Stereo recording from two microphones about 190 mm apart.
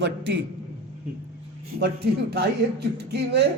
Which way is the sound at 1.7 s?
60° right (ahead or behind).